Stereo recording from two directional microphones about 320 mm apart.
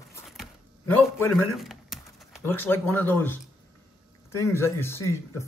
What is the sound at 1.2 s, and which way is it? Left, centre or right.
Speech, centre.